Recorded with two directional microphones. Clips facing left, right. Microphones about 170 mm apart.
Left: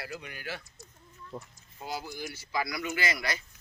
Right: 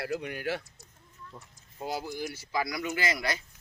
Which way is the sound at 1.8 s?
50° right (ahead or behind).